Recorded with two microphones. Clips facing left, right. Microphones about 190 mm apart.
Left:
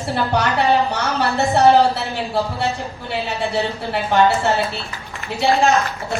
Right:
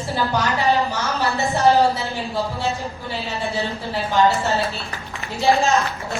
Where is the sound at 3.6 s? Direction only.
65° left (ahead or behind).